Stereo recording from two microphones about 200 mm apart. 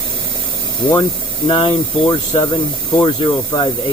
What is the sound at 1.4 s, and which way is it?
Speech, 25° left (ahead or behind).